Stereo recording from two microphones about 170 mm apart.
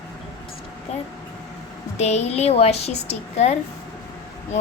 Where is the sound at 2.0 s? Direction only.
40° left (ahead or behind).